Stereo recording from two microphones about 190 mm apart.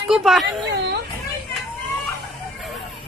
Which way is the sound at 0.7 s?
60° right (ahead or behind).